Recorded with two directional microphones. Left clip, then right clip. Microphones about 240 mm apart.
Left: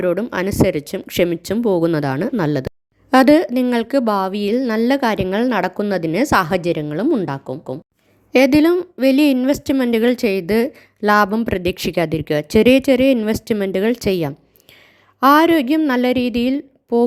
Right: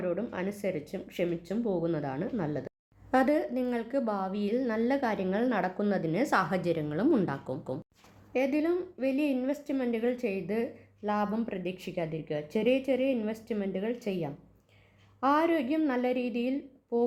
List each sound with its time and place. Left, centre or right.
0.0 s speech: left
8.3 s speech: left